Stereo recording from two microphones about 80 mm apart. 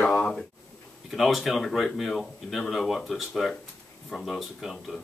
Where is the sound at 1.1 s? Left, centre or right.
Centre.